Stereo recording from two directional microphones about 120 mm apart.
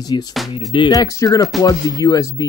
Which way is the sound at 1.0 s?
25° left (ahead or behind).